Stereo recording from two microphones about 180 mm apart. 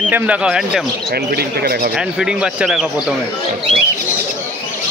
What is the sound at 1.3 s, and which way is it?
Speech, 60° right (ahead or behind).